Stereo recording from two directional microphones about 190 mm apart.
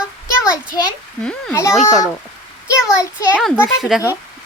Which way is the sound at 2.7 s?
15° left (ahead or behind).